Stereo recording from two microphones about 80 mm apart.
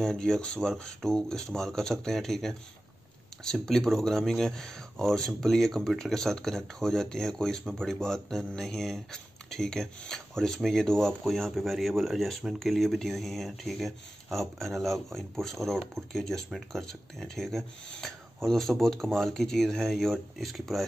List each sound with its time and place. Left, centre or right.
0.0 s speech: centre
3.6 s speech: centre